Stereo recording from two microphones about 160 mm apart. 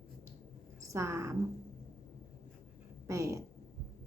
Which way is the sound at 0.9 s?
15° right (ahead or behind).